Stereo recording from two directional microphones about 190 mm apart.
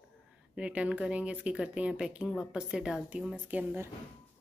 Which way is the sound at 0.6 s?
5° right (ahead or behind).